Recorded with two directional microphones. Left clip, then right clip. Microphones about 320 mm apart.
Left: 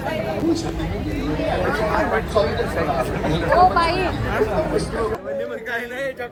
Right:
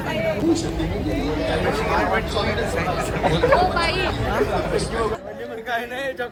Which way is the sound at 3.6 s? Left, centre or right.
Centre.